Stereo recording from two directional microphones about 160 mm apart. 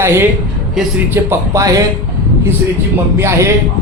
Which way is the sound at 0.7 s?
Centre (ahead or behind).